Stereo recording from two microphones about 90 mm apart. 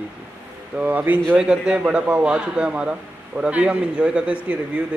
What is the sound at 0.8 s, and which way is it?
A man's voice, 20° right (ahead or behind).